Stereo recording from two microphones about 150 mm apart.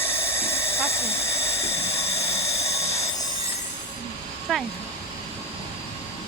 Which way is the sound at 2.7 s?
45° left (ahead or behind).